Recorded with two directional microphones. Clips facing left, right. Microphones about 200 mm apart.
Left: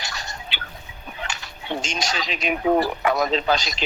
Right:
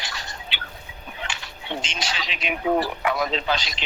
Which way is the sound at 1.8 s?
45° left (ahead or behind).